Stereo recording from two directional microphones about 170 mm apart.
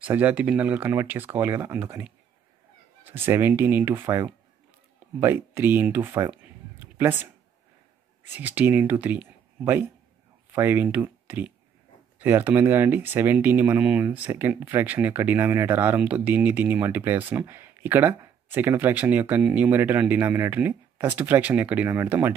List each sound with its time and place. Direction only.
0.0 s speech: 10° right (ahead or behind)
6.8 s a sound: 10° right (ahead or behind)
8.4 s speech: 10° right (ahead or behind)